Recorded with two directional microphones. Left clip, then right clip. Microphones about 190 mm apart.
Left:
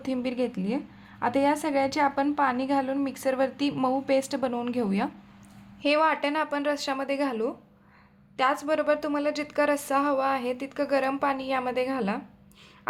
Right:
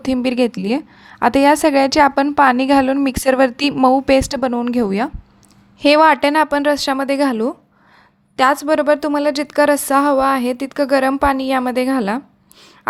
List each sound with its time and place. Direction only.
0.0 s a woman's voice: 45° right (ahead or behind)